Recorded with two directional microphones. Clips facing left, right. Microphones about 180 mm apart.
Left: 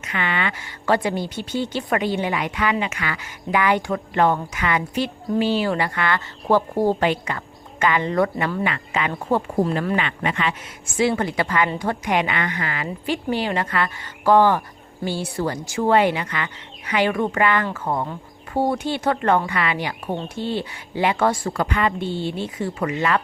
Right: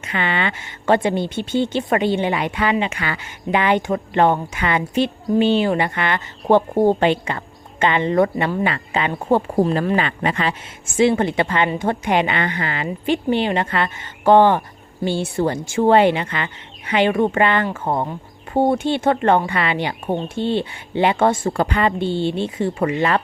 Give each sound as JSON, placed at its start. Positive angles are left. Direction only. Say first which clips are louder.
{"t": 0.0, "sound": "speech", "louder": "right 3 dB", "side_deg": -30}
{"t": 9.9, "sound": "speech", "louder": "right 3 dB", "side_deg": -35}